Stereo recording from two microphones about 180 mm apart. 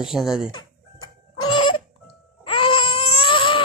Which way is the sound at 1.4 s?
25° left (ahead or behind).